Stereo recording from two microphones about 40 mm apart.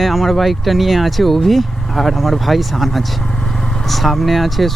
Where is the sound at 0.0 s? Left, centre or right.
Centre.